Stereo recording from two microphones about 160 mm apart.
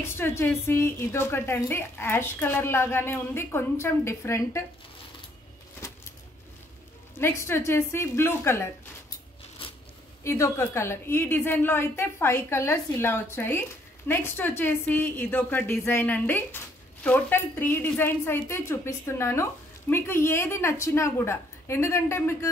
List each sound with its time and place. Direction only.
0.0 s a woman's voice: 15° left (ahead or behind)
7.2 s a woman's voice: 15° left (ahead or behind)
10.2 s a woman's voice: 15° left (ahead or behind)